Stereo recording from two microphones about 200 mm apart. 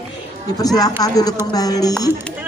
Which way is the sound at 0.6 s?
20° left (ahead or behind).